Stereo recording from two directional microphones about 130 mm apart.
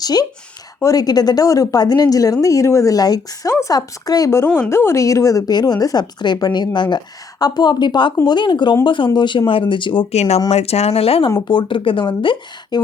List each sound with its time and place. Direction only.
0.0 s a woman's voice: 30° left (ahead or behind)
10.1 s speech: 55° left (ahead or behind)
11.3 s speech: 35° left (ahead or behind)